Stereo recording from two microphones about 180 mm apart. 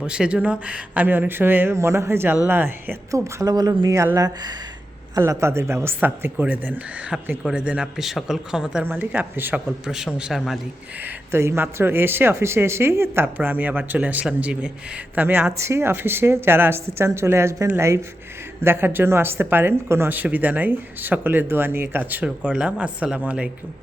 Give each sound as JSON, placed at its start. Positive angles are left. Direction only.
{"t": 0.0, "sound": "a man's voice", "side_deg": -5}
{"t": 11.0, "sound": "speech", "side_deg": -15}